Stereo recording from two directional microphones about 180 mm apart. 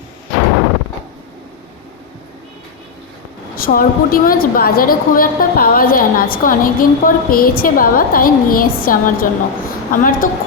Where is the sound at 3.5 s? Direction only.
55° left (ahead or behind).